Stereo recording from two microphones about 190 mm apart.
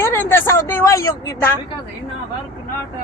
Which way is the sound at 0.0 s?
15° left (ahead or behind).